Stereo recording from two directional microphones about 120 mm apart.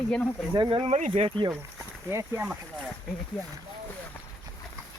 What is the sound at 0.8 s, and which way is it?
Speech, 70° right (ahead or behind).